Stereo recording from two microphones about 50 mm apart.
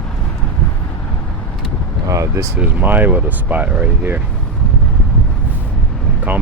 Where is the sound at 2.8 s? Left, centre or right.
Right.